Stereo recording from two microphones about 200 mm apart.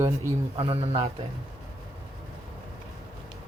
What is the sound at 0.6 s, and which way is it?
Speech, 30° right (ahead or behind).